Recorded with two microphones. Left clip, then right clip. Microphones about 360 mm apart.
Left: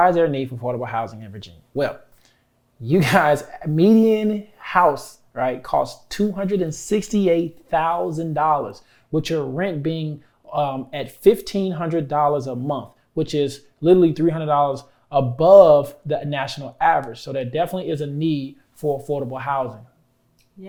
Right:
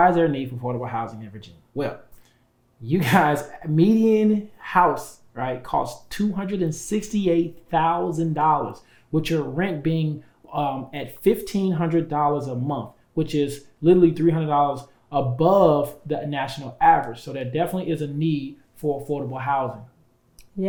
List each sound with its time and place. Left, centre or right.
0.0 s speech: left
2.8 s speech: left